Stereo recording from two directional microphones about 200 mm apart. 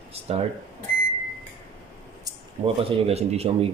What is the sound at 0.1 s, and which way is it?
Speech, 30° right (ahead or behind).